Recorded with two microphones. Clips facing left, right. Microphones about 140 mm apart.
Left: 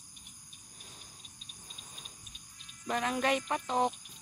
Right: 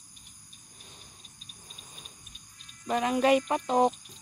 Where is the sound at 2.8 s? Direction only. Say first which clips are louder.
Right 6 dB; 10° right (ahead or behind).